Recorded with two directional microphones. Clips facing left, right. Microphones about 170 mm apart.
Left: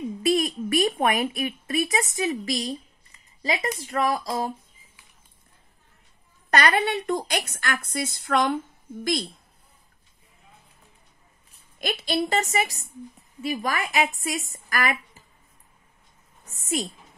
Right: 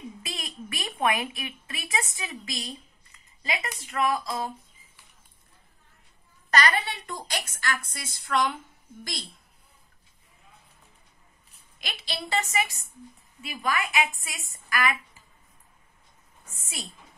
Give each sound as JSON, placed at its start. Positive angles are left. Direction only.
{"t": 0.5, "sound": "a woman's voice", "side_deg": 50}
{"t": 0.9, "sound": "a woman's voice", "side_deg": 35}
{"t": 6.5, "sound": "a woman's voice", "side_deg": 55}
{"t": 11.8, "sound": "a woman's voice", "side_deg": 50}
{"t": 16.4, "sound": "a woman's voice", "side_deg": 45}